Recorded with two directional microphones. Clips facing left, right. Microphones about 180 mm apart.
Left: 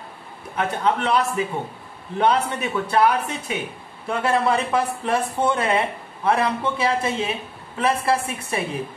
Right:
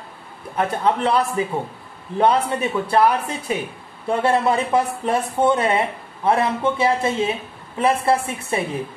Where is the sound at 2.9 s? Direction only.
30° right (ahead or behind).